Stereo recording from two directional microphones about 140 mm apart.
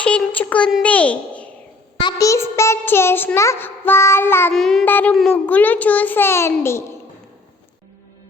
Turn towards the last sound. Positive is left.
turn(degrees=20)  # may be behind; listen again after turning